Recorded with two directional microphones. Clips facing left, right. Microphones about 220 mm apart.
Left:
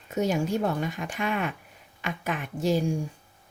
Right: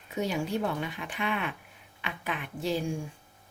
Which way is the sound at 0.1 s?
45° left (ahead or behind).